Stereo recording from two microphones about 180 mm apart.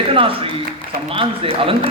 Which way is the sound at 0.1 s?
30° right (ahead or behind).